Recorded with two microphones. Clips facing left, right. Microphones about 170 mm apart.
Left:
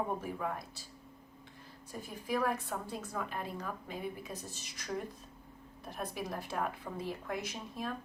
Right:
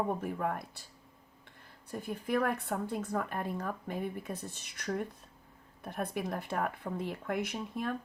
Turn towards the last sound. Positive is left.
turn(degrees=-55)  # may be behind; listen again after turning